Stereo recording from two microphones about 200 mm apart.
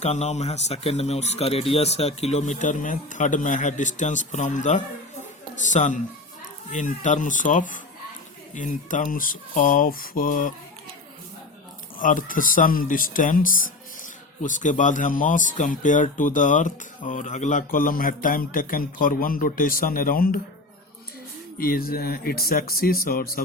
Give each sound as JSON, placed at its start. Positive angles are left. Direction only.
{"t": 0.0, "sound": "speech", "side_deg": 35}
{"t": 11.9, "sound": "speech", "side_deg": 40}
{"t": 21.6, "sound": "speech", "side_deg": 50}